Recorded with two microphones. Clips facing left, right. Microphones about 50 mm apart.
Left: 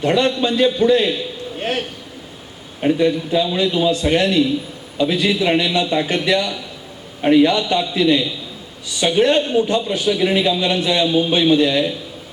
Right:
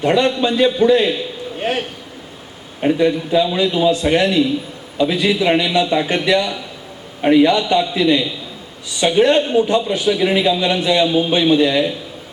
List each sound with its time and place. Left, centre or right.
0.0 s a man's voice: centre
3.9 s a man's voice: centre
7.6 s a man's voice: centre